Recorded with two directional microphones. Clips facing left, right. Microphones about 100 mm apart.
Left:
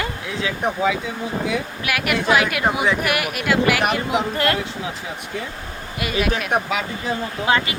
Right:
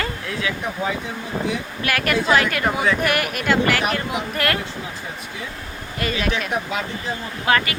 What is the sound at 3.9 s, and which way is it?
Speech, 20° left (ahead or behind).